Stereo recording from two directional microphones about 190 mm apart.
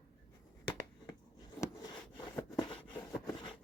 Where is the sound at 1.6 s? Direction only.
20° left (ahead or behind).